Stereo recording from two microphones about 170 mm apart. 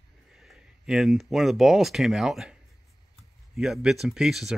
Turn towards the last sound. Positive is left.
turn(degrees=0)  # may be behind; listen again after turning